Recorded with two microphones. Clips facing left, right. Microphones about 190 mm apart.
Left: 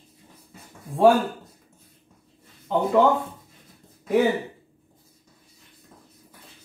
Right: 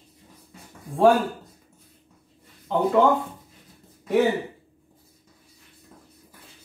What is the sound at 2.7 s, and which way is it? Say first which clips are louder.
Speech: even; centre (ahead or behind).